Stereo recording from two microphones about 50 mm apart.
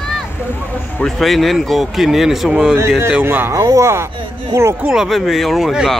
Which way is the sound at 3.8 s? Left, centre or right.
Right.